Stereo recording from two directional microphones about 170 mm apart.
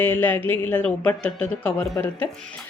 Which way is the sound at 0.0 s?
10° left (ahead or behind).